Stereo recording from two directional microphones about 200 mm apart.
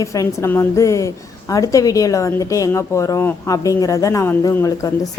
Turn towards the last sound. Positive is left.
turn(degrees=15)  # may be behind; listen again after turning